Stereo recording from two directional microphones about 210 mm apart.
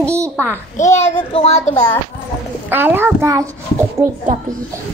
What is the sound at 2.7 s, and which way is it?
A child's voice, 10° right (ahead or behind).